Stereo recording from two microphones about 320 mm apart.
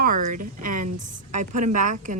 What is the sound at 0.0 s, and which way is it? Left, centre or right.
A woman's voice, right.